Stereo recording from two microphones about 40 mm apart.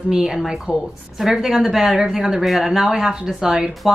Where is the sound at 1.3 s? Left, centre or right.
Centre.